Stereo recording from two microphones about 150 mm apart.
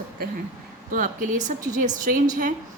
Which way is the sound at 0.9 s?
60° right (ahead or behind).